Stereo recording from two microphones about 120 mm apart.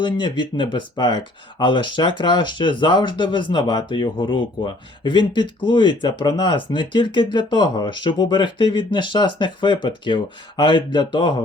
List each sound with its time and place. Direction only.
0.0 s speech: 40° left (ahead or behind)